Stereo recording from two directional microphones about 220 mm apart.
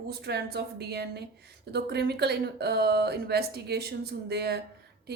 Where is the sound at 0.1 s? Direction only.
50° right (ahead or behind).